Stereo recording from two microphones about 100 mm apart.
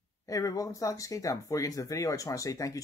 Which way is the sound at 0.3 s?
35° left (ahead or behind).